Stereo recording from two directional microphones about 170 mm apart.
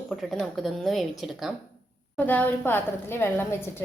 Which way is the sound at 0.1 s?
Centre (ahead or behind).